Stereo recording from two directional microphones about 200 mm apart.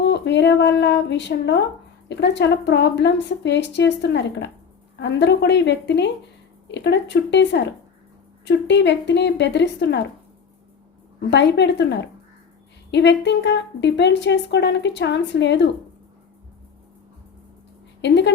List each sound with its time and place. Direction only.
0.0 s speech: 60° left (ahead or behind)
11.3 s speech: 60° left (ahead or behind)
18.0 s speech: 60° left (ahead or behind)